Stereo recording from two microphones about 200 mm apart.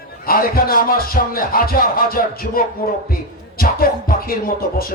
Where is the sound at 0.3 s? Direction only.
50° left (ahead or behind).